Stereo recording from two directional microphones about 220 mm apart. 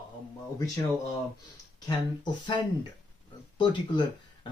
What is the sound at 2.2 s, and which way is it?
Speech, 20° left (ahead or behind).